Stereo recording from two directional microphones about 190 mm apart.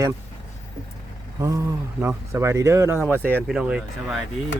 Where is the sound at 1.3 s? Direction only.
15° right (ahead or behind).